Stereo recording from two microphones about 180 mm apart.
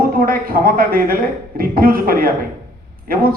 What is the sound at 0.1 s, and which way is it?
Speech, 55° right (ahead or behind).